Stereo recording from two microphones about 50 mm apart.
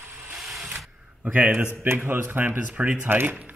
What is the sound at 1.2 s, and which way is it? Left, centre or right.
Speech, right.